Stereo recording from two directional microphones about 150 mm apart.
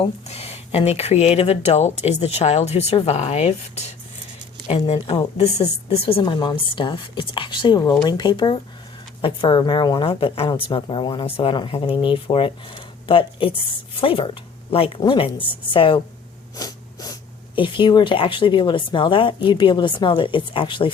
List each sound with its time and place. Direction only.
0.0 s speech: 45° left (ahead or behind)